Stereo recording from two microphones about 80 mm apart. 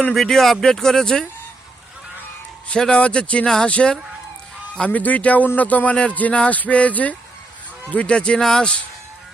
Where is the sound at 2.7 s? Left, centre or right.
Centre.